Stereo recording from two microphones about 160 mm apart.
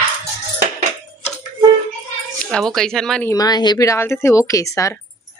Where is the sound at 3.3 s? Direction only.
25° left (ahead or behind).